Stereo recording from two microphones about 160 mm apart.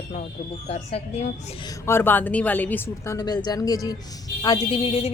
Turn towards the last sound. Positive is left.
turn(degrees=35)  # may be behind; listen again after turning